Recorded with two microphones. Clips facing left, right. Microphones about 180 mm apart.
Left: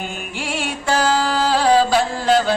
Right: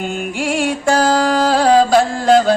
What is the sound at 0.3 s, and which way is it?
Music, 45° right (ahead or behind).